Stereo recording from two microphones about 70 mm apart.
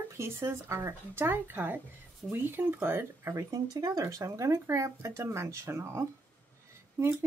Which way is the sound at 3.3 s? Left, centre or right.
Right.